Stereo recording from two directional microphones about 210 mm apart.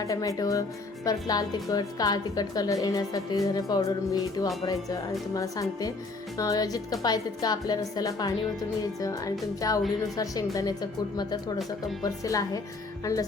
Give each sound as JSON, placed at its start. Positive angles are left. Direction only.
{"t": 0.0, "sound": "a woman's voice", "side_deg": 15}